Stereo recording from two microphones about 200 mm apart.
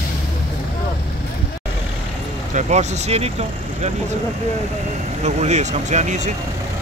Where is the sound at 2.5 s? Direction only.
35° right (ahead or behind).